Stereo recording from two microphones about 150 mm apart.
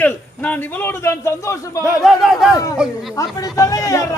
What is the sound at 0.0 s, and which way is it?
A man's voice, 10° left (ahead or behind).